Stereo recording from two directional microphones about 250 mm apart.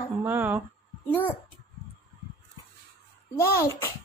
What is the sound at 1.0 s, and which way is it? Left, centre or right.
Speech, centre.